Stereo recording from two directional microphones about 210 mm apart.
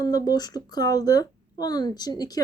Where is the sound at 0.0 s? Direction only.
20° left (ahead or behind).